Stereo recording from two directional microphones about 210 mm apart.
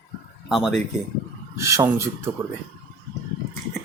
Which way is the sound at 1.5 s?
15° right (ahead or behind).